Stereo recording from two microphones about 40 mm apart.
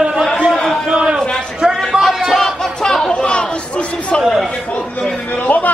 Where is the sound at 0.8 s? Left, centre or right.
Right.